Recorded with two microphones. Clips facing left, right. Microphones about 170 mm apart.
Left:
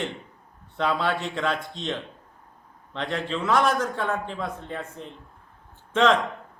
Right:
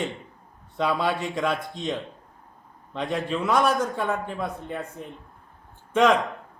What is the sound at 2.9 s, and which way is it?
A man's voice, 10° right (ahead or behind).